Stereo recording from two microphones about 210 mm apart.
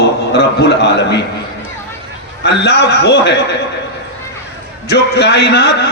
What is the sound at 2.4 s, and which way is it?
Speech, 50° left (ahead or behind).